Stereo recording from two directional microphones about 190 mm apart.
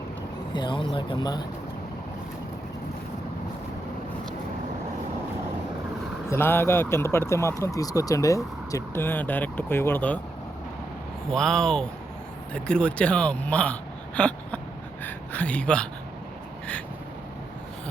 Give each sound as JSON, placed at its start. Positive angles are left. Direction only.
{"t": 0.5, "sound": "speech", "side_deg": 25}
{"t": 6.2, "sound": "speech", "side_deg": 15}
{"t": 11.3, "sound": "speech", "side_deg": 5}
{"t": 14.2, "sound": "a sound", "side_deg": 5}
{"t": 15.0, "sound": "speech", "side_deg": 10}